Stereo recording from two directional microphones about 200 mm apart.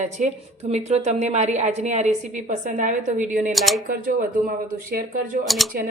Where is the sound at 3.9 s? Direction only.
45° right (ahead or behind).